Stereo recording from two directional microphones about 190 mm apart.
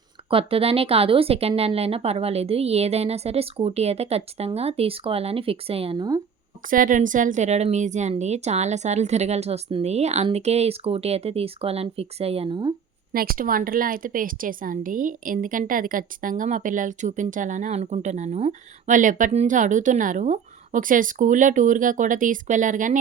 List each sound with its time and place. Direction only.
0.3 s a woman's voice: 30° right (ahead or behind)
6.7 s a woman's voice: 45° right (ahead or behind); by 12.7 s 25° right (ahead or behind)
13.1 s a woman's voice: 50° right (ahead or behind)